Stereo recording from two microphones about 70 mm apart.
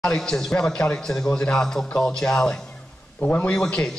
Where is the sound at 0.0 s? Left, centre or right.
Centre.